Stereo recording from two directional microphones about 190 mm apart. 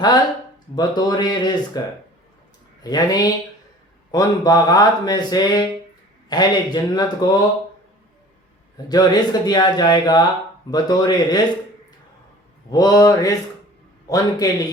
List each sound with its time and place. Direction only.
0.8 s speech: 20° left (ahead or behind)
2.8 s speech: 20° left (ahead or behind)
8.9 s speech: 20° left (ahead or behind)
12.7 s speech: 20° left (ahead or behind)